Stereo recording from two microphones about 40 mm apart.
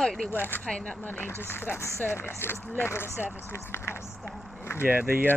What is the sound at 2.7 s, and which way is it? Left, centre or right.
Speech, left.